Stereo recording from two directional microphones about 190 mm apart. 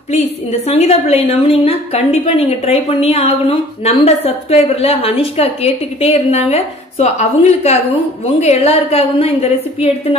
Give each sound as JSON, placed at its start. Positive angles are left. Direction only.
{"t": 0.1, "sound": "a woman's voice", "side_deg": 35}